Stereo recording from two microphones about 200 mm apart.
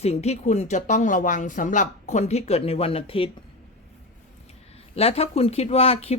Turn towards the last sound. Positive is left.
turn(degrees=30)  # may be behind; listen again after turning